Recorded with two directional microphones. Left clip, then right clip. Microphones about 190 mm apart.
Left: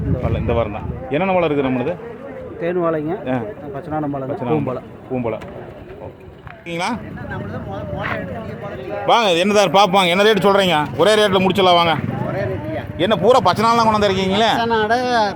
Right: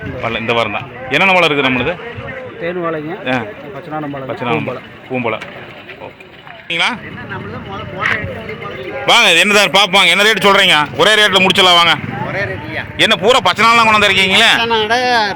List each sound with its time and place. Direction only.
0.3 s a man's voice: 10° right (ahead or behind)
2.6 s speech: 30° left (ahead or behind)
4.4 s a man's voice: 15° right (ahead or behind)
6.7 s a man's voice: centre (ahead or behind)
9.0 s a man's voice: 10° right (ahead or behind)
12.3 s speech: 60° left (ahead or behind)
13.0 s a man's voice: centre (ahead or behind)
14.6 s speech: 65° left (ahead or behind)